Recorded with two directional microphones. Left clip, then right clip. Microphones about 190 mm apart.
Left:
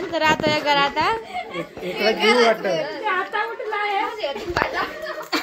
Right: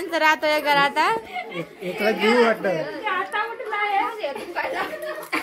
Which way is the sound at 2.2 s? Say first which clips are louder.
Left 2 dB; 40° right (ahead or behind).